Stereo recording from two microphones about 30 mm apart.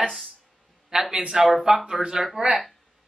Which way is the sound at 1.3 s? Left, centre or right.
Centre.